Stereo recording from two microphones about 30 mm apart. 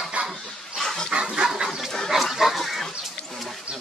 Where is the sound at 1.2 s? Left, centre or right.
Right.